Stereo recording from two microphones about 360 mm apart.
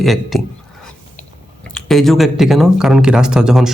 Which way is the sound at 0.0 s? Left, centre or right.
Centre.